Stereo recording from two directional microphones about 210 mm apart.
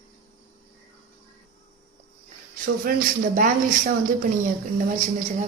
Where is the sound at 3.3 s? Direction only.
40° right (ahead or behind).